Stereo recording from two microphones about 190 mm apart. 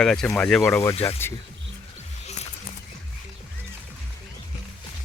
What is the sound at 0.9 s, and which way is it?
Speech, 30° left (ahead or behind).